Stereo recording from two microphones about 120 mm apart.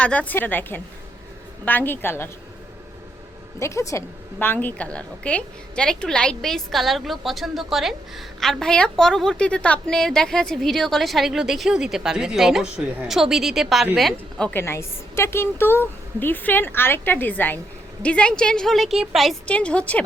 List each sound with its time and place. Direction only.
0.0 s a woman's voice: 10° left (ahead or behind)
3.6 s a woman's voice: 25° left (ahead or behind); by 14.6 s 10° left (ahead or behind)
14.6 s a woman's voice: 20° left (ahead or behind)